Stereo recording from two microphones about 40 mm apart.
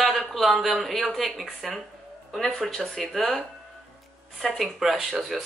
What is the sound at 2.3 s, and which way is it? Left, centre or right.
Speech, centre.